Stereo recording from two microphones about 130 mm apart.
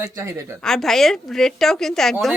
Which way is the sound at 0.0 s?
20° right (ahead or behind).